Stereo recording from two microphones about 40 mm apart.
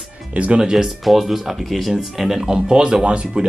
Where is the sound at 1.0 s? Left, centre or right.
Centre.